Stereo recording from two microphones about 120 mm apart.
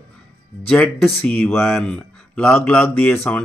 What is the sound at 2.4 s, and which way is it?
Speech, 20° left (ahead or behind).